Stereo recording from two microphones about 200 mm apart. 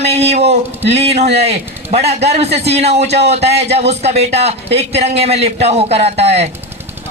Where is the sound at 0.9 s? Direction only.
30° right (ahead or behind).